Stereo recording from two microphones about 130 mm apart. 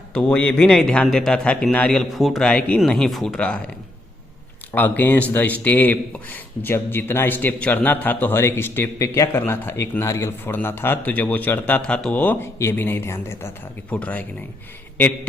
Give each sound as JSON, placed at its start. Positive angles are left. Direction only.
{"t": 0.1, "sound": "a man's voice", "side_deg": 10}
{"t": 4.7, "sound": "a man's voice", "side_deg": 15}